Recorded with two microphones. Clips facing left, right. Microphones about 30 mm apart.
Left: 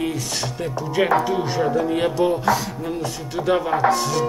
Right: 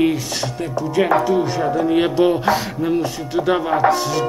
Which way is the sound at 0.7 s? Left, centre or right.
Centre.